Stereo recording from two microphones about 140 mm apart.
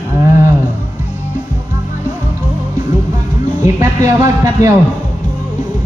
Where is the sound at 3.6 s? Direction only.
20° right (ahead or behind).